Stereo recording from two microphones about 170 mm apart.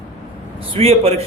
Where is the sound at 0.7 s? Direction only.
35° right (ahead or behind).